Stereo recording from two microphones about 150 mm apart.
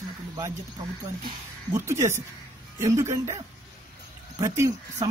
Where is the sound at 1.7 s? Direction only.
20° right (ahead or behind).